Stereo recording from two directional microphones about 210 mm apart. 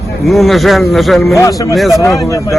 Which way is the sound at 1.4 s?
15° left (ahead or behind).